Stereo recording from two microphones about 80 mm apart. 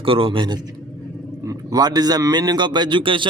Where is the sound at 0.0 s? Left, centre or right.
Right.